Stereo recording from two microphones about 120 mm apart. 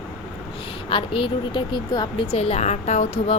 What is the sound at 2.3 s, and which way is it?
A woman's voice, 60° left (ahead or behind).